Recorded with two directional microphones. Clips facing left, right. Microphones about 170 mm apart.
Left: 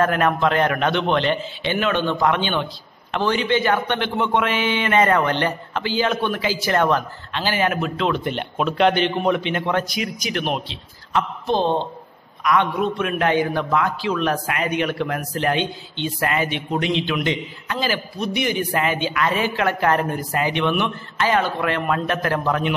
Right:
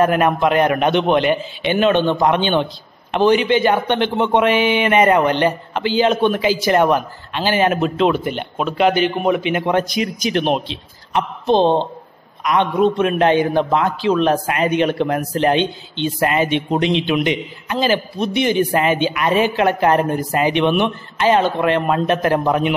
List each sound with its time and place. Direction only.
0.0 s a man's voice: 15° right (ahead or behind)
8.1 s a man's voice: 5° right (ahead or behind)